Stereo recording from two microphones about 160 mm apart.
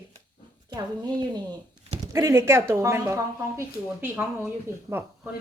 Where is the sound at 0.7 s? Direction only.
25° right (ahead or behind).